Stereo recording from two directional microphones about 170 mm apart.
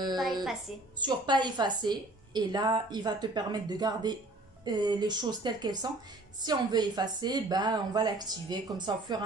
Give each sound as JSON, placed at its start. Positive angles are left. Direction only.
{"t": 0.2, "sound": "a woman's voice", "side_deg": 0}
{"t": 0.9, "sound": "a woman's voice", "side_deg": -25}